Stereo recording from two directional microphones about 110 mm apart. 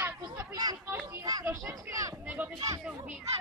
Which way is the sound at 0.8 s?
20° right (ahead or behind).